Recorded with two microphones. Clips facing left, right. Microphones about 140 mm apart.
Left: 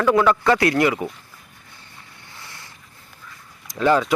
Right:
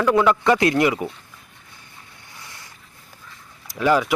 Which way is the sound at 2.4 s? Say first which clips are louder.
Left 1 dB; 20° right (ahead or behind).